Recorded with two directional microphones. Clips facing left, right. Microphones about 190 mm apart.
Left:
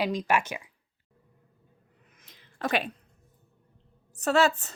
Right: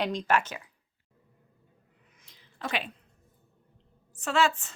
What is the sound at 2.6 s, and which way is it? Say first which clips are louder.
Speech: left 5 dB; 50° left (ahead or behind).